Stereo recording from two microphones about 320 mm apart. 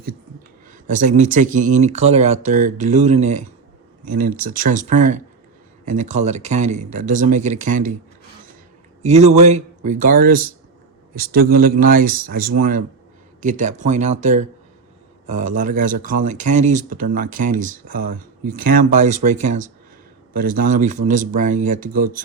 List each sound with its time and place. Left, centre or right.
0.7 s speech: right
9.0 s speech: right